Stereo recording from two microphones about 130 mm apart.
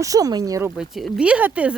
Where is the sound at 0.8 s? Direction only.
5° right (ahead or behind).